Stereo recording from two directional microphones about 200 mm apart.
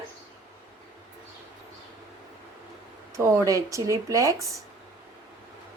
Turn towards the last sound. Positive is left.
turn(degrees=-15)  # may be behind; listen again after turning